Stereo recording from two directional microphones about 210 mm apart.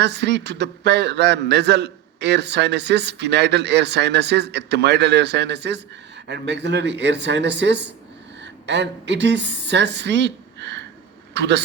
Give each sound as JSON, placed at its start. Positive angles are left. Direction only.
{"t": 0.0, "sound": "a man's voice", "side_deg": -55}